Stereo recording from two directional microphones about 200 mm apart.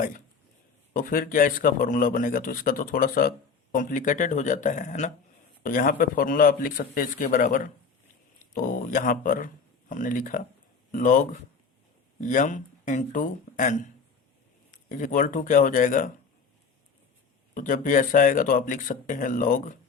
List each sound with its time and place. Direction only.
0.9 s a man's voice: 45° left (ahead or behind)
17.5 s speech: 40° left (ahead or behind)